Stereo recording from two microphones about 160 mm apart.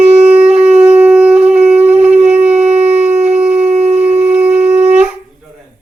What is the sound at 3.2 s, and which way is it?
Shofar, 40° right (ahead or behind).